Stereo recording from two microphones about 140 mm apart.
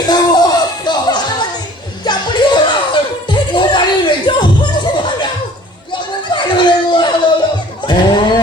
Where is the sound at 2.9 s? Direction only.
35° left (ahead or behind).